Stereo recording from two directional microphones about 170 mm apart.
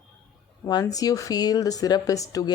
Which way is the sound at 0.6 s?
20° left (ahead or behind).